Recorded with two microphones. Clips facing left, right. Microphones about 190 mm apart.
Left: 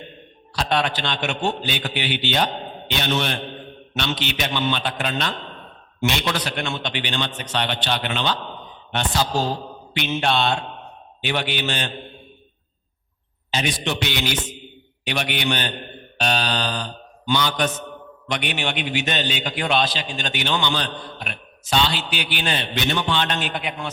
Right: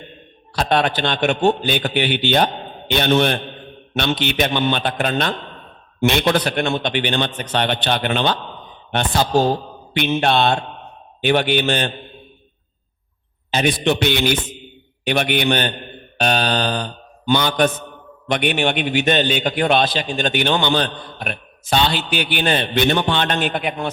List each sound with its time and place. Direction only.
0.5 s a man's voice: 55° right (ahead or behind)
13.5 s a man's voice: 55° right (ahead or behind)
16.1 s mantra: 55° right (ahead or behind)
18.3 s a man's voice: 55° right (ahead or behind)